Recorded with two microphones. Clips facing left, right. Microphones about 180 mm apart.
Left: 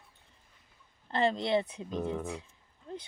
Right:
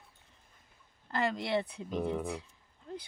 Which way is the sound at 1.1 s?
25° left (ahead or behind).